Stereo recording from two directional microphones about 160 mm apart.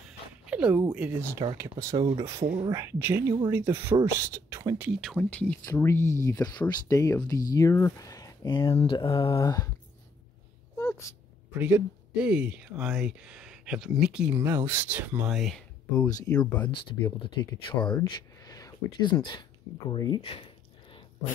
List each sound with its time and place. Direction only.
0.5 s speech: 10° right (ahead or behind)
1.3 s speech: 20° right (ahead or behind)
4.8 s speech: centre (ahead or behind); by 9.7 s 25° left (ahead or behind)
11.5 s speech: 10° right (ahead or behind)
16.0 s speech: 5° left (ahead or behind)
16.7 s speech: 30° left (ahead or behind)
17.8 s a sound: 25° left (ahead or behind)
18.9 s speech: 30° left (ahead or behind)
20.2 s a sound: 35° left (ahead or behind)